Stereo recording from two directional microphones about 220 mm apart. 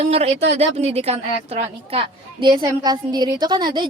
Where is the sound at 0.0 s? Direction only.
30° right (ahead or behind).